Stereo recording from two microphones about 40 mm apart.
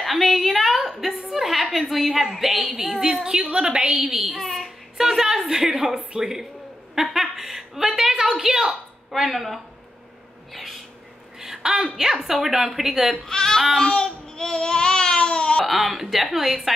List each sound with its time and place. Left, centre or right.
0.0 s a woman's voice: centre
4.4 s a child's voice: centre
4.9 s a woman's voice: centre
10.5 s a sound: centre
11.3 s a sound: centre
12.0 s a woman's voice: centre
13.2 s speech: centre
13.7 s child singing: centre
15.6 s a woman's voice: centre